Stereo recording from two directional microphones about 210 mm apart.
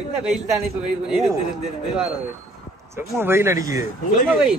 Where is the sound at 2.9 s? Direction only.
10° right (ahead or behind).